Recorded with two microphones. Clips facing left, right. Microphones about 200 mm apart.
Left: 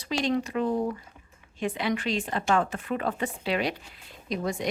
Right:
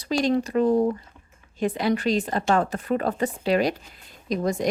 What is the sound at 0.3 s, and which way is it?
Speech, 40° right (ahead or behind).